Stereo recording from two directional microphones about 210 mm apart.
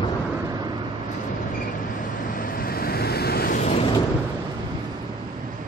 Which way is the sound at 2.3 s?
45° left (ahead or behind).